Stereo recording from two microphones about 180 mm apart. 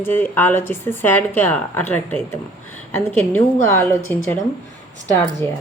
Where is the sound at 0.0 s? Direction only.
10° left (ahead or behind).